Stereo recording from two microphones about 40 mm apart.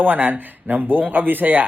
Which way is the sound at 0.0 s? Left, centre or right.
Right.